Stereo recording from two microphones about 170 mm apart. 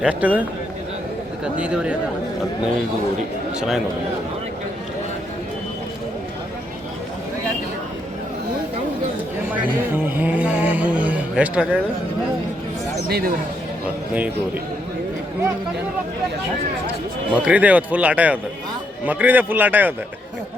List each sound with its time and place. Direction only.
0.0 s speech: 10° right (ahead or behind)
1.5 s speech: 5° right (ahead or behind)
10.0 s speech: 10° right (ahead or behind)
13.1 s speech: 65° right (ahead or behind)
14.1 s speech: 10° right (ahead or behind)
17.3 s speech: 10° right (ahead or behind)